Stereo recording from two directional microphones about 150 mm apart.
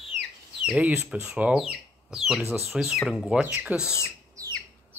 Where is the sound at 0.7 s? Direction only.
10° right (ahead or behind).